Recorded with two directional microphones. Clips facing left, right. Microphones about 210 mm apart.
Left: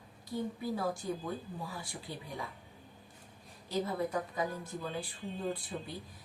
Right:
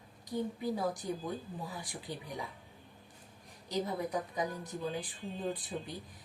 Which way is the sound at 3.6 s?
15° right (ahead or behind).